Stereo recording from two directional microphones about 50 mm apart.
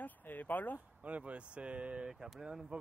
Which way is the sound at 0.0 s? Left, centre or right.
Left.